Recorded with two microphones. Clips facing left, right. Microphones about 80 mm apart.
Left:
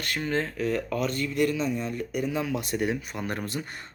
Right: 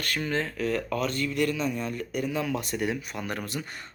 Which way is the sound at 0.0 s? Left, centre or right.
Left.